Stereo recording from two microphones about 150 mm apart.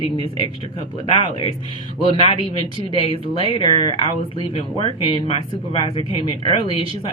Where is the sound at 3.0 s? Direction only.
35° left (ahead or behind).